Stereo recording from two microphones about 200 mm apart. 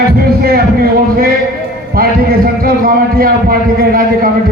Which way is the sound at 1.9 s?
50° right (ahead or behind).